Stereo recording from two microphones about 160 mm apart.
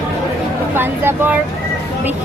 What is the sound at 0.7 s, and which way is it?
Speech, 15° right (ahead or behind).